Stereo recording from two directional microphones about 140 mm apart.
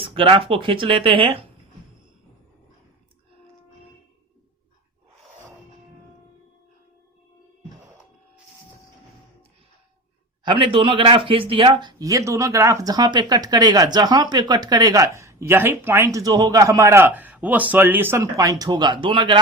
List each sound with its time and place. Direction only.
0.0 s speech: 40° right (ahead or behind)
10.4 s speech: 40° right (ahead or behind)